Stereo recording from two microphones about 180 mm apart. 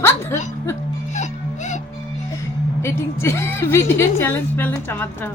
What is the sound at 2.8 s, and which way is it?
A woman's voice, 15° left (ahead or behind).